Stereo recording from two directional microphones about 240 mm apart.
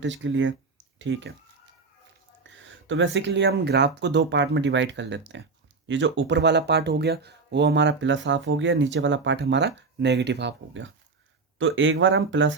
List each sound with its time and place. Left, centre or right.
0.0 s speech: right
2.4 s speech: right